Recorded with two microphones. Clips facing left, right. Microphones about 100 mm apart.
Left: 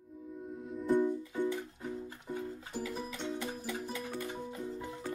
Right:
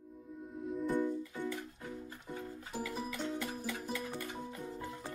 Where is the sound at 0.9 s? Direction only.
20° left (ahead or behind).